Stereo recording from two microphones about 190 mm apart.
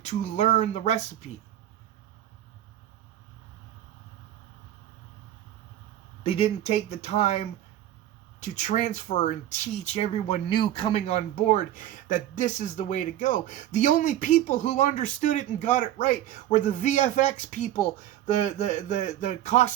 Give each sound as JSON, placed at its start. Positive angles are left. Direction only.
{"t": 0.0, "sound": "speech", "side_deg": 35}
{"t": 6.2, "sound": "speech", "side_deg": 30}